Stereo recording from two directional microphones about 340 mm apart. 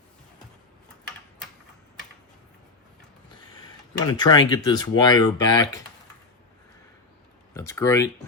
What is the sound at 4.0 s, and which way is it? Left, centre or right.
Speech, centre.